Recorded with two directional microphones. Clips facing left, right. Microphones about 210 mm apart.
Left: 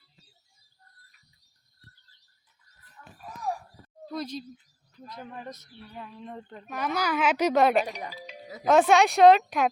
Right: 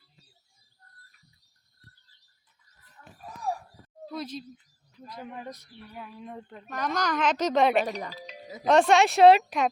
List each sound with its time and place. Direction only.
4.0 s a woman's voice: 5° right (ahead or behind)
7.9 s speech: 40° right (ahead or behind)
8.6 s a woman's voice: centre (ahead or behind)